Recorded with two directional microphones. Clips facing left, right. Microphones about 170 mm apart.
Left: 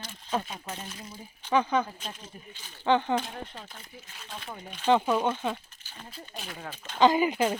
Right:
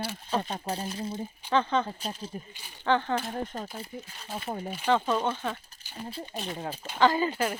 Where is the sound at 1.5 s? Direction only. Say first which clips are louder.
Left 1 dB; 10° left (ahead or behind).